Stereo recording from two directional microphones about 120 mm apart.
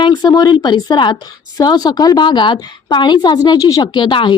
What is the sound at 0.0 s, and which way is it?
A woman's voice, 35° left (ahead or behind).